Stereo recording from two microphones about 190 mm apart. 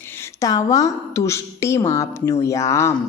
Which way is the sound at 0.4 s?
20° left (ahead or behind).